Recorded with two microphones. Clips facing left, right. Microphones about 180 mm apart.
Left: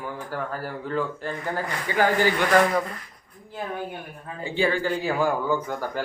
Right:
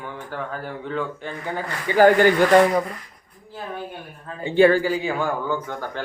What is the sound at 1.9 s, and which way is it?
Speech, 20° right (ahead or behind).